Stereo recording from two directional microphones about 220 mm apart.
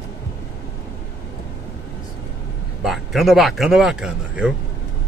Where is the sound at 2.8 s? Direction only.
Centre (ahead or behind).